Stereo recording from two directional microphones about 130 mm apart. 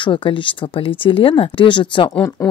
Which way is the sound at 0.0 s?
40° left (ahead or behind).